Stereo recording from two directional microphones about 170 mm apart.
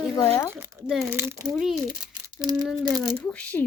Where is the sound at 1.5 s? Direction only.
Centre (ahead or behind).